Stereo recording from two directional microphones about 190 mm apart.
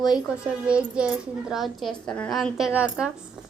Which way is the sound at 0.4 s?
5° right (ahead or behind).